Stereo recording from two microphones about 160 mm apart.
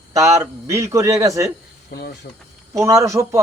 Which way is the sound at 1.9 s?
80° left.